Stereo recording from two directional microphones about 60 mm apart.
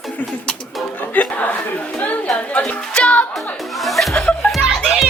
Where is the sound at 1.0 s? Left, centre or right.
Left.